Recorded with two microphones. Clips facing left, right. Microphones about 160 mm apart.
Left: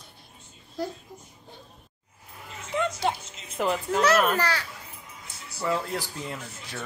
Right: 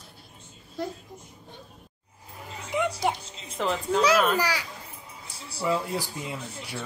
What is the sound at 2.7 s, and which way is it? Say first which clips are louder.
Music: right 1 dB; 15° right (ahead or behind).